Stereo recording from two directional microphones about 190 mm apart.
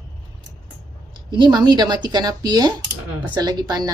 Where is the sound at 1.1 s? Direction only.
25° right (ahead or behind).